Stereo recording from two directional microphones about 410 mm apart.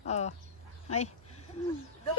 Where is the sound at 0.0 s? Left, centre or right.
Centre.